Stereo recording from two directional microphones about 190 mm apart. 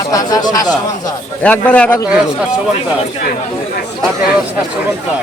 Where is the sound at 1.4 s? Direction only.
5° left (ahead or behind).